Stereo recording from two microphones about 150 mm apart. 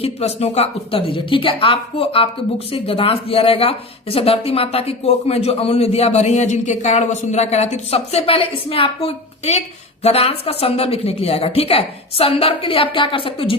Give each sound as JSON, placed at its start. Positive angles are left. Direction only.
{"t": 0.0, "sound": "speech", "side_deg": 45}